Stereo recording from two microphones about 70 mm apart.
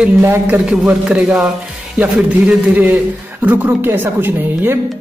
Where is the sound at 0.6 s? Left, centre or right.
Centre.